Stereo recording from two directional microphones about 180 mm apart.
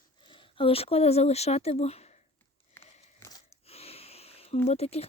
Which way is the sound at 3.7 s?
35° left (ahead or behind).